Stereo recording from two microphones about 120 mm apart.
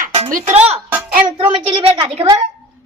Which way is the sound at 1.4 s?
45° right (ahead or behind).